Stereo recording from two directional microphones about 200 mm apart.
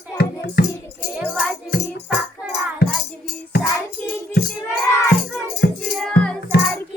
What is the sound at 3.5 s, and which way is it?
Music, 55° left (ahead or behind).